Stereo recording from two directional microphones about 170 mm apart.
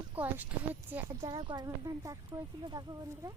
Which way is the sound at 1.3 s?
25° right (ahead or behind).